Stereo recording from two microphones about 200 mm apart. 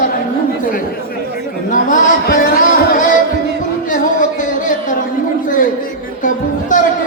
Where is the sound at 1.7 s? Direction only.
40° left (ahead or behind).